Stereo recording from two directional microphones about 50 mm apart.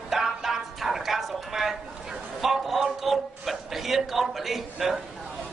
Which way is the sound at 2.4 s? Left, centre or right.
Centre.